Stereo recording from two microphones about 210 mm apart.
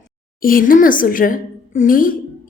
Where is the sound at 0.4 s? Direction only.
40° left (ahead or behind).